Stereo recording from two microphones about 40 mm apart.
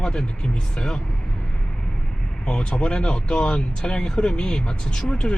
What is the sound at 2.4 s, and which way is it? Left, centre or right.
Speech, left.